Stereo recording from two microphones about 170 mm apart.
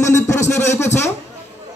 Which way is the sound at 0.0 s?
20° left (ahead or behind).